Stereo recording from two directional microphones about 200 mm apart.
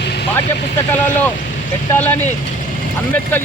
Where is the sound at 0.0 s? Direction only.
55° left (ahead or behind).